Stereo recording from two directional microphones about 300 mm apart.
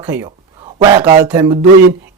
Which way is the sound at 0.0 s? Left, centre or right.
Centre.